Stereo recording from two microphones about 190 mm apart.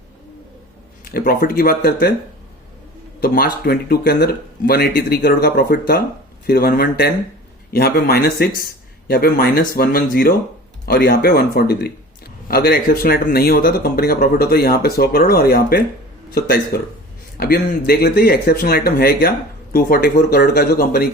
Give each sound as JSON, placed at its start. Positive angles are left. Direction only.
{"t": 1.1, "sound": "speech", "side_deg": 50}
{"t": 3.2, "sound": "speech", "side_deg": 50}